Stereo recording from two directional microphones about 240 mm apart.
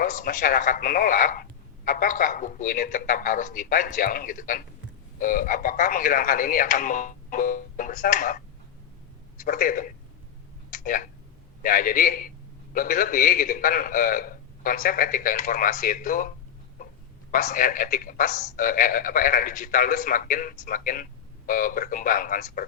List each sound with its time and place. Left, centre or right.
0.0 s a man's voice: left
9.4 s a man's voice: left
10.7 s a sound: left
11.6 s a man's voice: left
17.3 s a man's voice: left